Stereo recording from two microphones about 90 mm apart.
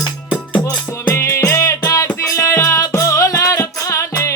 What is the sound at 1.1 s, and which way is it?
Music, 30° left (ahead or behind).